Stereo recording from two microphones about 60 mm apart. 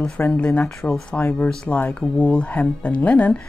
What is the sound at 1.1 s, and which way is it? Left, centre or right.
Speech, left.